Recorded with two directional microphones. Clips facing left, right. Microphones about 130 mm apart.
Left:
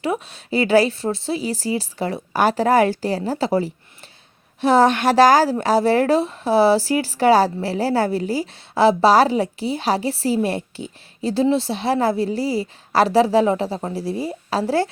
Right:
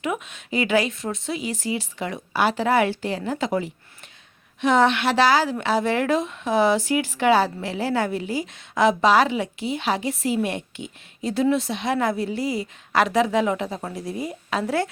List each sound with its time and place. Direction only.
0.0 s a woman's voice: 35° left (ahead or behind)